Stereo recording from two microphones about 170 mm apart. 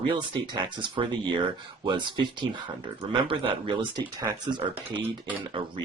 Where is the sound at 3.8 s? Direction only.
25° right (ahead or behind).